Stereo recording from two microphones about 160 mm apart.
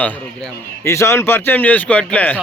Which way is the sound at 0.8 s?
15° left (ahead or behind).